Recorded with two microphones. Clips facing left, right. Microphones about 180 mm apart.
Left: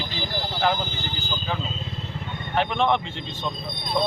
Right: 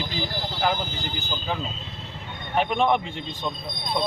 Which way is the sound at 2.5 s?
10° right (ahead or behind).